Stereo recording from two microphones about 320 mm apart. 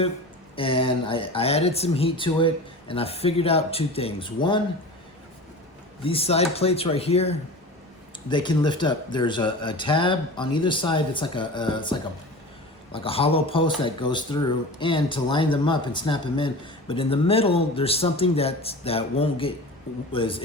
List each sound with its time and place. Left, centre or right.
0.5 s speech: centre
6.0 s speech: centre